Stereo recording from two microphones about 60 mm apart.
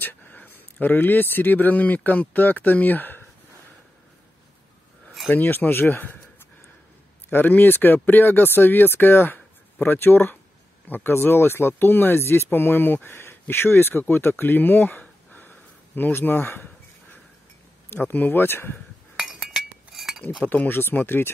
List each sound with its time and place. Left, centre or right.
0.0 s speech: left
5.3 s speech: left
7.2 s speech: left
19.1 s chink: centre
20.4 s speech: left